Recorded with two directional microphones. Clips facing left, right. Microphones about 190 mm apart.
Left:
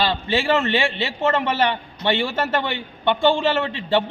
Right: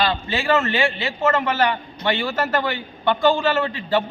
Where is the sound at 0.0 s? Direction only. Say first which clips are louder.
Left 1 dB; 30° left (ahead or behind).